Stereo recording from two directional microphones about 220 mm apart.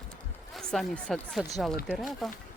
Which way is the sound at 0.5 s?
Centre (ahead or behind).